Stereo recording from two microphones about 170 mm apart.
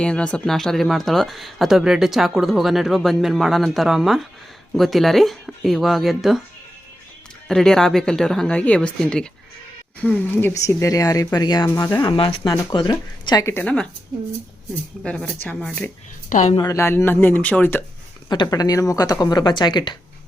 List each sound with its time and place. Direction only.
0.0 s speech: 5° left (ahead or behind)
7.4 s speech: 5° left (ahead or behind)
15.0 s speech: 5° left (ahead or behind)
16.3 s a woman's voice: 45° left (ahead or behind)
16.6 s speech: 15° left (ahead or behind)
18.3 s speech: 25° left (ahead or behind)